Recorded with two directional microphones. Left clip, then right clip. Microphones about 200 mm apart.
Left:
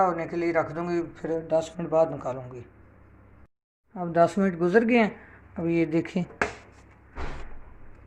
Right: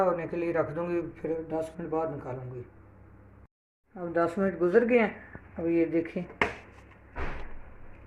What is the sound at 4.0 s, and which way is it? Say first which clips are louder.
Speech: left 6 dB; 55° left (ahead or behind).